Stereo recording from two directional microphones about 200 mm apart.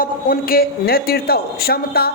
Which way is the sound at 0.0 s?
45° left (ahead or behind).